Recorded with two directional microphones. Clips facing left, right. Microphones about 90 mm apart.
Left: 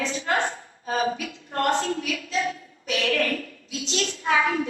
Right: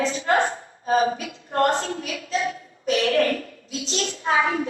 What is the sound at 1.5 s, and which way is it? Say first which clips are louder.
A child's voice: right 2 dB; 35° right (ahead or behind).